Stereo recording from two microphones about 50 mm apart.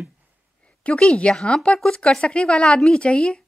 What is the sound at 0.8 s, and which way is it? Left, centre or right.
Speech, left.